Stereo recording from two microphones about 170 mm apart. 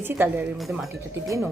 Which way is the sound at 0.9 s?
15° right (ahead or behind).